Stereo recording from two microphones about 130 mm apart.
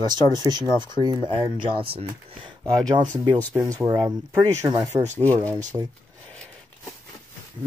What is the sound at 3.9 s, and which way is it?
Speech, 15° right (ahead or behind).